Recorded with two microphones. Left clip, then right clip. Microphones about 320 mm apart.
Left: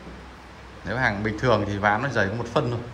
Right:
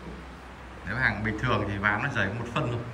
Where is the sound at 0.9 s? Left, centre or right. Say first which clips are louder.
Left 3 dB; centre.